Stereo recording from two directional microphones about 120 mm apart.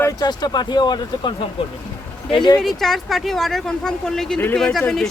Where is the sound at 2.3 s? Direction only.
40° left (ahead or behind).